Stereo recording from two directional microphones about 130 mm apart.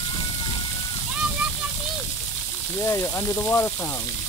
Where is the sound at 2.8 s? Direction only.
20° left (ahead or behind).